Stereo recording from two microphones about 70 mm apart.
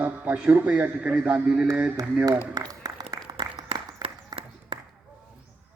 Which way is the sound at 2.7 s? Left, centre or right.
Right.